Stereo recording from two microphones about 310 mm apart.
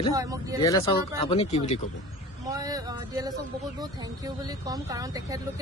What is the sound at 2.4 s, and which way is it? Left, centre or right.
Speech, centre.